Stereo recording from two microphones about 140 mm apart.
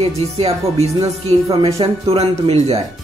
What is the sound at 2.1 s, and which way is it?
Speech, 40° right (ahead or behind).